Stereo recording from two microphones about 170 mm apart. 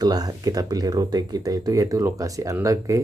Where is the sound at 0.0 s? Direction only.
20° right (ahead or behind).